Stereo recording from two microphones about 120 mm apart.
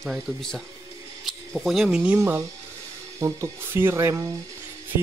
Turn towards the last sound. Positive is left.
turn(degrees=-25)  # may be behind; listen again after turning